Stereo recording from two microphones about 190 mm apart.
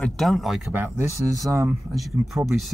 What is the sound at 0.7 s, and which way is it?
Speech, 10° right (ahead or behind).